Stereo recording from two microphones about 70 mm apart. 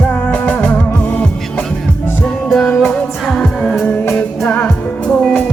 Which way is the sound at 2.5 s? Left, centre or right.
Centre.